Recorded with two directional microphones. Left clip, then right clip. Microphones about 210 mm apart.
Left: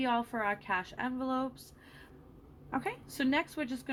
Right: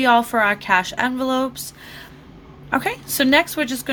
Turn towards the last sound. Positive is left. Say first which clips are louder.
# right 15 dB
turn(degrees=-25)  # may be behind; listen again after turning